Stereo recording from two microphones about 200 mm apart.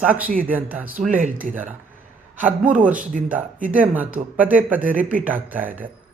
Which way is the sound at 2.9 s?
40° right (ahead or behind).